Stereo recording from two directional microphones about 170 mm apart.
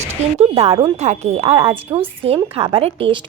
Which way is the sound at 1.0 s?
40° right (ahead or behind).